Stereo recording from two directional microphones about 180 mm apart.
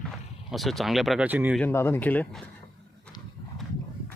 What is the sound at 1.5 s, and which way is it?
Speech, 10° left (ahead or behind).